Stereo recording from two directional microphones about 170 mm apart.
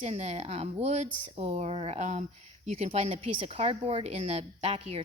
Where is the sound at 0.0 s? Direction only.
40° right (ahead or behind).